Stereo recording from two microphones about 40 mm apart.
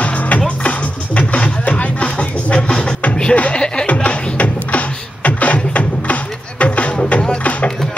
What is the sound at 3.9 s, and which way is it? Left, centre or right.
Beatboxing, left.